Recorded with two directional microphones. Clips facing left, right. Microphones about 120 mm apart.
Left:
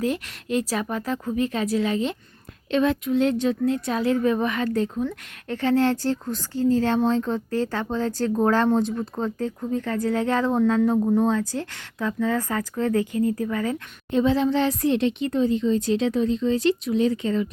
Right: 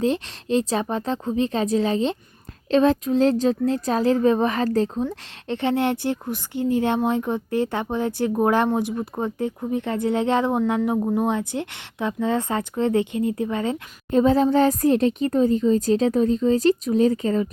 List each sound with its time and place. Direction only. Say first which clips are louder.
0.0 s speech: right 3 dB; 30° right (ahead or behind)
5.0 s speech: right 2 dB; 20° right (ahead or behind)
14.1 s speech: right 3 dB; 40° right (ahead or behind)